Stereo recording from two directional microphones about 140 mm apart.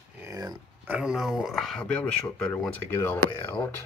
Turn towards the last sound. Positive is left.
turn(degrees=10)  # may be behind; listen again after turning